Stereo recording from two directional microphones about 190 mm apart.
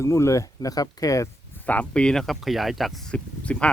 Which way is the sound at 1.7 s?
5° left (ahead or behind).